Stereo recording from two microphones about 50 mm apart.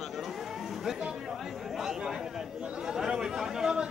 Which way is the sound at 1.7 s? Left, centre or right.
Centre.